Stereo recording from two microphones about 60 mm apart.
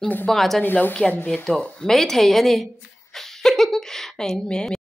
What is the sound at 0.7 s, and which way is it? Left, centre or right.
Speech, left.